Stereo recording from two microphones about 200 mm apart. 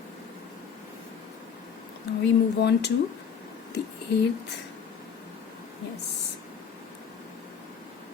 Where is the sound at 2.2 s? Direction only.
55° left (ahead or behind).